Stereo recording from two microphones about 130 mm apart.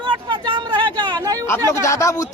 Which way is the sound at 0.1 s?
35° right (ahead or behind).